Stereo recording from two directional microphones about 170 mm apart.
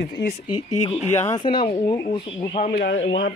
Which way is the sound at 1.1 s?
15° left (ahead or behind).